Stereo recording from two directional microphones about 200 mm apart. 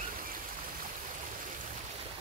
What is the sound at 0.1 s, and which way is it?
Stream, 45° right (ahead or behind).